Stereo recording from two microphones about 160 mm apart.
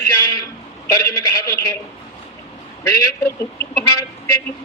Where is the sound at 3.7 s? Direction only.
20° left (ahead or behind).